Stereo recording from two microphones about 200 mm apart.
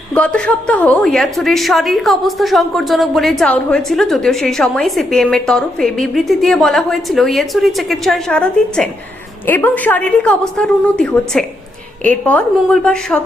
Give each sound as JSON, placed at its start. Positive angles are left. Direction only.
{"t": 0.1, "sound": "a woman's voice", "side_deg": 5}